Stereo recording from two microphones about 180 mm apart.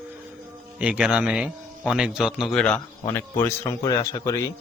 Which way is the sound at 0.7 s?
5° right (ahead or behind).